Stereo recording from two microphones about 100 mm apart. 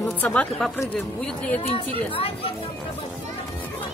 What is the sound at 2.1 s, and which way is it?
Speech, 70° left (ahead or behind).